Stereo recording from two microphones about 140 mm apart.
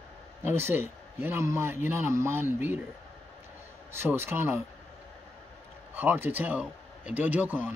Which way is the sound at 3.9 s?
15° right (ahead or behind).